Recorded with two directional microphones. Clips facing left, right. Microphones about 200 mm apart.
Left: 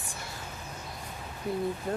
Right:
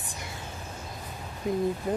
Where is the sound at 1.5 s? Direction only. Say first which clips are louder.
Right 4 dB; 20° right (ahead or behind).